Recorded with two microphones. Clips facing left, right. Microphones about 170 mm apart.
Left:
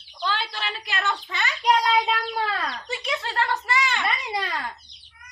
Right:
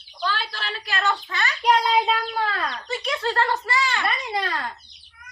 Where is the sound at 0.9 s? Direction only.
20° left (ahead or behind).